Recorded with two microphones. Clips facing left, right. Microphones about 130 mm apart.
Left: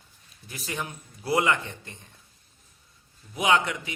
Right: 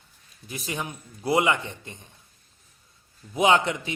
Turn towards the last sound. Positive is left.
turn(degrees=-25)  # may be behind; listen again after turning